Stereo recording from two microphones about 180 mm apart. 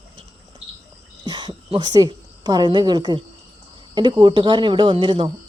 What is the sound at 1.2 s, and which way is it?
A woman's voice, 20° right (ahead or behind).